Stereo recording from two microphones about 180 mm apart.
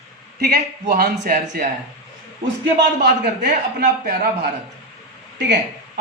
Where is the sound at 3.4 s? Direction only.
55° right (ahead or behind).